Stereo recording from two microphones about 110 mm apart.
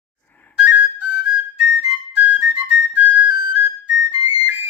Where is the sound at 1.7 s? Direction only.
10° right (ahead or behind).